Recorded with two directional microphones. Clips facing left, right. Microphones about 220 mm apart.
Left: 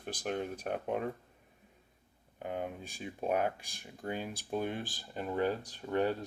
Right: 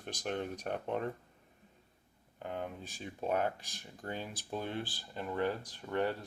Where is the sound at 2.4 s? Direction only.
15° left (ahead or behind).